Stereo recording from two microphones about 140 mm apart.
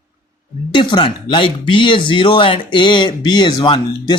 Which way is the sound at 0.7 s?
35° left (ahead or behind).